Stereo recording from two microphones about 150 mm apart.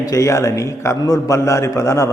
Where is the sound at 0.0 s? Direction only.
20° left (ahead or behind).